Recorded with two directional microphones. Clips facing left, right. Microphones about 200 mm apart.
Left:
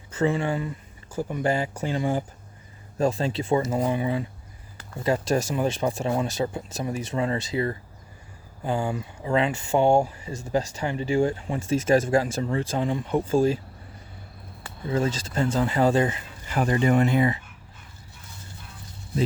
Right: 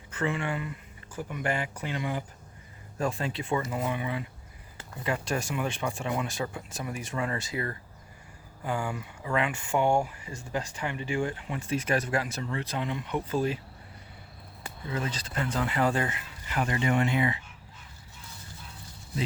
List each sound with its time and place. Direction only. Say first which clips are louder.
0.3 s speech: left 5 dB; 35° left (ahead or behind)
14.8 s speech: left 8 dB; 30° left (ahead or behind)